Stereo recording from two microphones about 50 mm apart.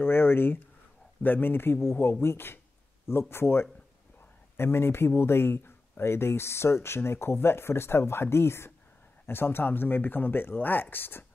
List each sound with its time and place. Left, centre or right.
0.0 s speech: left